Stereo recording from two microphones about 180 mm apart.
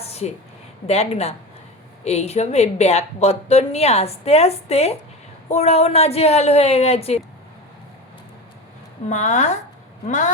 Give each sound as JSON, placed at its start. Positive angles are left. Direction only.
{"t": 0.0, "sound": "a sound", "side_deg": 35}
{"t": 0.9, "sound": "a woman's voice", "side_deg": 35}
{"t": 9.0, "sound": "a woman's voice", "side_deg": 40}